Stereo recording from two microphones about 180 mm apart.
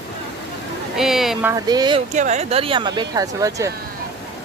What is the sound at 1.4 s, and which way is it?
Speech, 15° right (ahead or behind).